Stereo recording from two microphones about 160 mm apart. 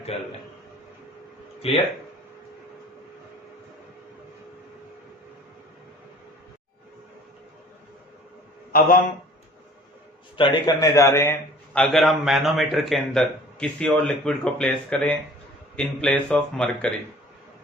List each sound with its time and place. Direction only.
0.1 s a man's voice: 40° left (ahead or behind)
1.6 s a man's voice: 40° left (ahead or behind)
10.3 s a man's voice: 30° left (ahead or behind); by 16.9 s 5° left (ahead or behind)